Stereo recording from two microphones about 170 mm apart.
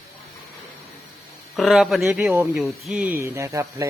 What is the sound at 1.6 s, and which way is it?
Speech, centre (ahead or behind).